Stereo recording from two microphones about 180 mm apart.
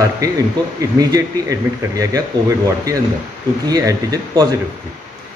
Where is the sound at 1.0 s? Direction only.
20° right (ahead or behind).